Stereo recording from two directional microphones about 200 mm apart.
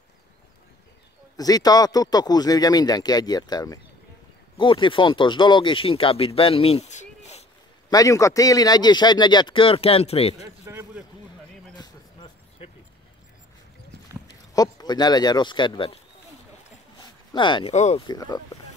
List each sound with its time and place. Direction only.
1.3 s speech: 20° left (ahead or behind); by 7.4 s 35° left (ahead or behind)
7.9 s speech: 15° left (ahead or behind)
10.4 s a sound: 15° right (ahead or behind)
11.8 s a sound: 25° left (ahead or behind)
14.5 s speech: 20° left (ahead or behind)
17.3 s speech: 25° left (ahead or behind)
17.7 s speech: 35° left (ahead or behind)
18.0 s speech: 20° left (ahead or behind)